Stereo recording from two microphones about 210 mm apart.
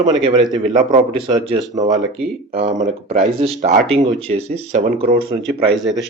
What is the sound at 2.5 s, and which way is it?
Speech, 30° right (ahead or behind).